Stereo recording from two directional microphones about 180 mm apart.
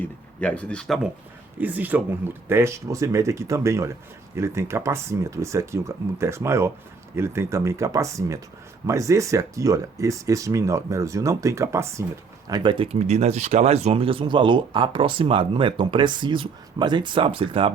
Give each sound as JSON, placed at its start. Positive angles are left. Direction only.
{"t": 0.0, "sound": "speech", "side_deg": 5}
{"t": 1.5, "sound": "speech", "side_deg": -10}